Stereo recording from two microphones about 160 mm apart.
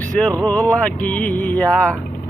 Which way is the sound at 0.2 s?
10° left (ahead or behind).